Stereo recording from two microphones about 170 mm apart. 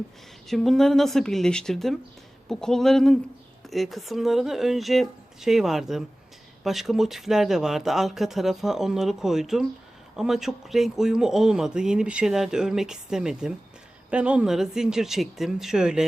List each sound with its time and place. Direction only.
0.4 s speech: centre (ahead or behind)